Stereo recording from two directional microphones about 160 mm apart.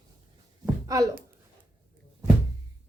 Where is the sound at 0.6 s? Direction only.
20° right (ahead or behind).